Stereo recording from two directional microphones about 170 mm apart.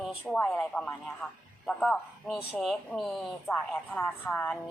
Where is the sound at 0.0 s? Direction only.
5° right (ahead or behind).